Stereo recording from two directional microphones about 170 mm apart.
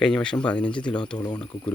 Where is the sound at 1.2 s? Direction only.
25° left (ahead or behind).